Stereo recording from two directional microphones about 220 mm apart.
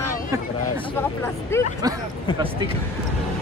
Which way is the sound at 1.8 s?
15° right (ahead or behind).